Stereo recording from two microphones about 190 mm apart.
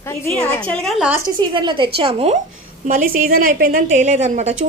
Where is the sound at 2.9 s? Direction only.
45° right (ahead or behind).